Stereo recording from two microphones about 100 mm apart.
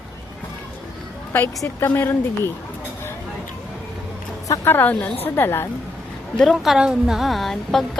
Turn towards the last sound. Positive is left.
turn(degrees=5)  # may be behind; listen again after turning